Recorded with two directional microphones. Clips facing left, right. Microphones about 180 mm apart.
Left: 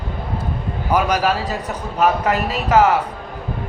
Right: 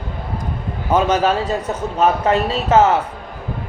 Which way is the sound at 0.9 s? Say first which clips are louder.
Right 2 dB; 25° right (ahead or behind).